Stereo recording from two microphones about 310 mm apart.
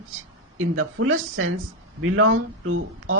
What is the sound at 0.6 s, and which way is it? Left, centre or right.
Speech, right.